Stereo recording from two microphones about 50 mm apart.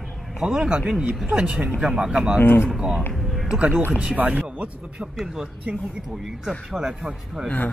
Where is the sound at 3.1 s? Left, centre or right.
Centre.